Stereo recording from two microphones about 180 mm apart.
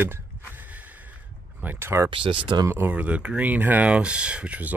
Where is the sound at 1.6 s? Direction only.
10° right (ahead or behind).